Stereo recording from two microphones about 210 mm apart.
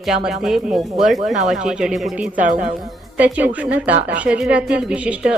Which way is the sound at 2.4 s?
35° right (ahead or behind).